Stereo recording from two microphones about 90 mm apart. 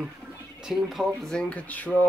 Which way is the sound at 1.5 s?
15° left (ahead or behind).